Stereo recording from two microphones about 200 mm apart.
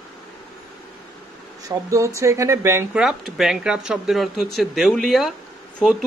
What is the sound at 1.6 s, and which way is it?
A man's voice, 15° right (ahead or behind).